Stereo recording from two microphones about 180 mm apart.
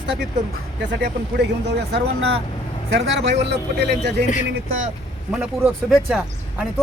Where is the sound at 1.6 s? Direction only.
65° right (ahead or behind).